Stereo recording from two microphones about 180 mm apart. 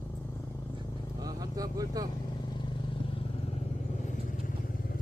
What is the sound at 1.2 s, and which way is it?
Vehicle, 20° right (ahead or behind).